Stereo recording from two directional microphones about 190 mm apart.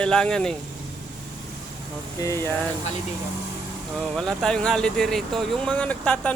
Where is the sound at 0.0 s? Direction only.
5° left (ahead or behind).